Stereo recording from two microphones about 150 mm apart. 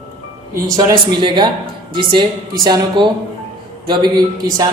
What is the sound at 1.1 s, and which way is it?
Speech, 30° right (ahead or behind).